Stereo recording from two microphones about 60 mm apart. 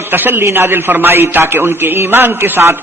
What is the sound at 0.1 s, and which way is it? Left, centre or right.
A man's voice, right.